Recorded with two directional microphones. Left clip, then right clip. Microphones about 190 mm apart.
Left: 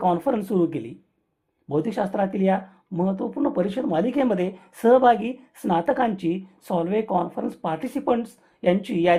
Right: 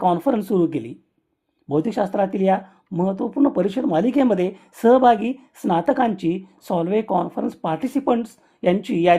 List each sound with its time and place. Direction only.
0.0 s speech: 35° right (ahead or behind)